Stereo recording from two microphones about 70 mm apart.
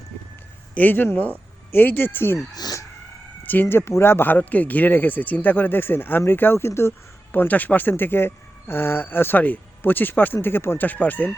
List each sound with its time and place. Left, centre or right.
0.7 s speech: left
3.4 s speech: left
7.3 s speech: left